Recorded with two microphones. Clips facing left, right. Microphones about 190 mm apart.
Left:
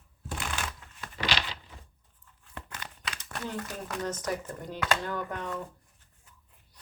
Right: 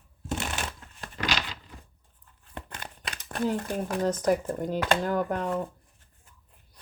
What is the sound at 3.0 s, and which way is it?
Crumpling, 55° right (ahead or behind).